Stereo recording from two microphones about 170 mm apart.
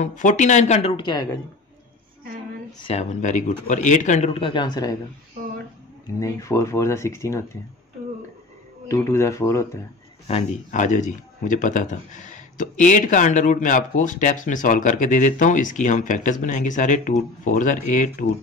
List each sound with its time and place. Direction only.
0.0 s speech: 45° left (ahead or behind); by 1.4 s 25° left (ahead or behind)
2.9 s speech: 40° left (ahead or behind); by 4.9 s 25° left (ahead or behind)
6.1 s speech: 20° left (ahead or behind)
8.8 s speech: 15° left (ahead or behind)
10.2 s speech: 45° left (ahead or behind)